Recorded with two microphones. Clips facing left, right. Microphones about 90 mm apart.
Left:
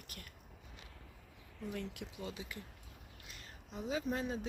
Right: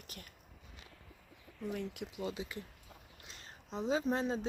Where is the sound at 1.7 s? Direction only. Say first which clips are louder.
Right 3 dB; 15° right (ahead or behind).